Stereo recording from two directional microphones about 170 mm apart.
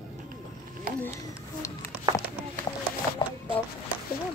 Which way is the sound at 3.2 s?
25° left (ahead or behind).